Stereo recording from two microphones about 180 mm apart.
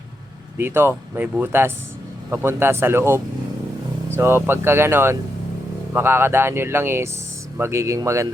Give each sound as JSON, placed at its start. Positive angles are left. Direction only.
{"t": 0.6, "sound": "speech", "side_deg": -10}